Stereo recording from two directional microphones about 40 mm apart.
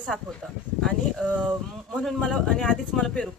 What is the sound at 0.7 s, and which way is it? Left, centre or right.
Speech, centre.